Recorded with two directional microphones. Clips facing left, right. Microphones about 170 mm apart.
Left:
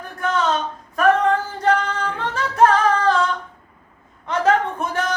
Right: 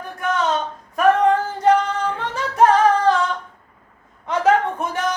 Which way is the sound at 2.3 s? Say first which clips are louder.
Even; 15° right (ahead or behind).